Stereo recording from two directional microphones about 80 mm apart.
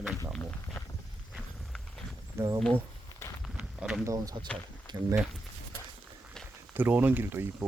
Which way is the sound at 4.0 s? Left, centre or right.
Right.